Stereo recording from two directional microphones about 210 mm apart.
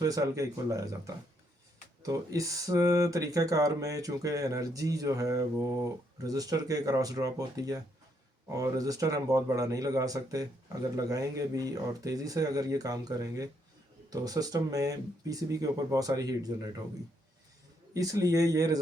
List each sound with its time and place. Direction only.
0.0 s speech: 15° right (ahead or behind)
17.9 s speech: 15° right (ahead or behind)